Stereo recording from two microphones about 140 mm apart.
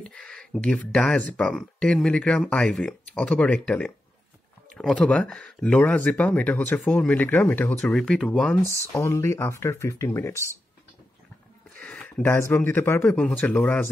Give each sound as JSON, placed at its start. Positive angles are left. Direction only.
{"t": 0.1, "sound": "speech", "side_deg": 5}
{"t": 8.9, "sound": "speech", "side_deg": 20}
{"t": 11.7, "sound": "speech", "side_deg": 15}